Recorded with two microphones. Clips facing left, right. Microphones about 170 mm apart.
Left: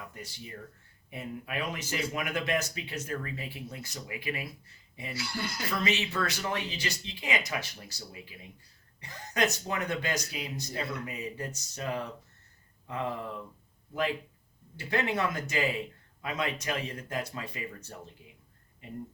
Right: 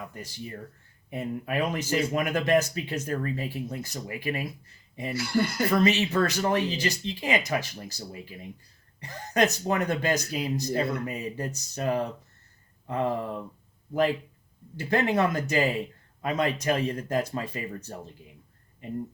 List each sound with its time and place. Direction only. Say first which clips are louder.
0.1 s speech: right 5 dB; 40° right (ahead or behind)
14.8 s speech: right 6 dB; 40° right (ahead or behind)